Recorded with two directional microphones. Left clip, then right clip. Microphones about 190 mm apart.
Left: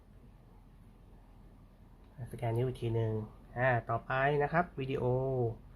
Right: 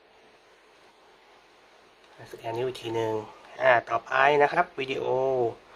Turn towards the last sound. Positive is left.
turn(degrees=-15)  # may be behind; listen again after turning